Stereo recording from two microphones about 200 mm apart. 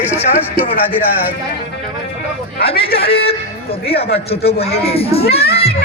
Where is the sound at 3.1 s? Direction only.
30° left (ahead or behind).